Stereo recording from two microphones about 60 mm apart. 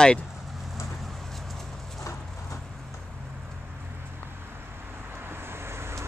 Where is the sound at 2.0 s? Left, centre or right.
Left.